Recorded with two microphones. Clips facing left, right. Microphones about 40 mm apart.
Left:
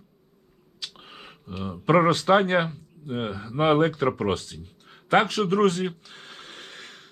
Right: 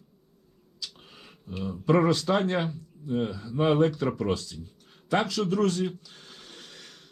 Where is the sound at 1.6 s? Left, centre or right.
Left.